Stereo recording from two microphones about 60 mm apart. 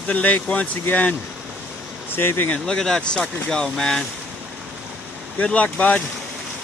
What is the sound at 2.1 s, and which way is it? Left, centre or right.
Speech, left.